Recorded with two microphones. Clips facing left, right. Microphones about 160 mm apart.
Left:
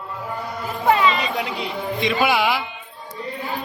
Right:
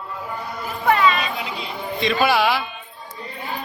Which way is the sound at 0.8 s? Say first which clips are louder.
Even; 20° left (ahead or behind).